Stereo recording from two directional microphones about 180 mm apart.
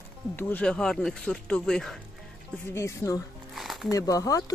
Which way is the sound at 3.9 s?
20° left (ahead or behind).